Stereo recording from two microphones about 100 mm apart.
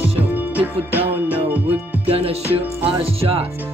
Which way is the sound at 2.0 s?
75° right (ahead or behind).